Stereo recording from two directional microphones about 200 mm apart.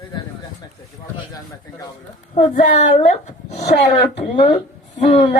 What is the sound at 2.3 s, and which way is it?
Speech, 35° left (ahead or behind).